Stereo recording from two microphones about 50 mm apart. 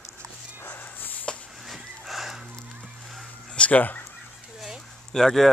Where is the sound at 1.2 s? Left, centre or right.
Left.